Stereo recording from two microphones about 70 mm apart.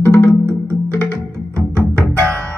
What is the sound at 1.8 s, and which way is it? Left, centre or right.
Music, right.